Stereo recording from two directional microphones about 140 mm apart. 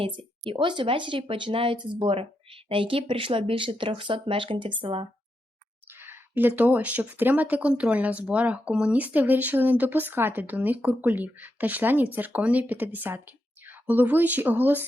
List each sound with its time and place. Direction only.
0.0 s speech: 40° right (ahead or behind)
6.0 s speech: 15° right (ahead or behind)